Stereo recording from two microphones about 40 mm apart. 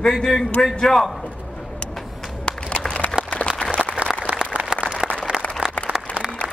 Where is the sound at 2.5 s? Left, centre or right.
Left.